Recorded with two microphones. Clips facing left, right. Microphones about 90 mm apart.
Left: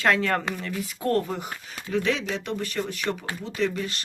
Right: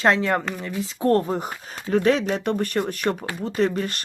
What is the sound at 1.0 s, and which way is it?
Speech, 30° right (ahead or behind).